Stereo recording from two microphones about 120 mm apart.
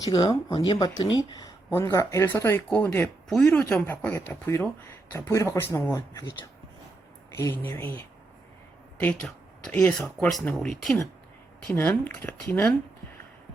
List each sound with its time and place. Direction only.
0.0 s speech: 35° left (ahead or behind)
1.7 s speech: 25° left (ahead or behind)
3.2 s speech: 5° left (ahead or behind)
9.2 s a sound: 5° left (ahead or behind)
9.8 s speech: 20° left (ahead or behind)
10.5 s speech: 5° left (ahead or behind)
11.6 s speech: 15° left (ahead or behind)